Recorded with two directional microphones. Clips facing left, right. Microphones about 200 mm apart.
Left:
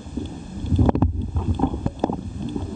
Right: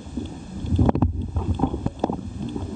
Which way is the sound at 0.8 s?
Centre (ahead or behind).